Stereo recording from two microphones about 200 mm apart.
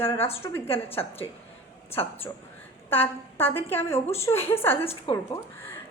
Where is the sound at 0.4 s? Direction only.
10° left (ahead or behind).